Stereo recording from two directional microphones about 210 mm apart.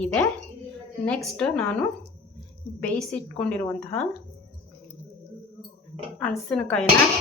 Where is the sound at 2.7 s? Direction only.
5° left (ahead or behind).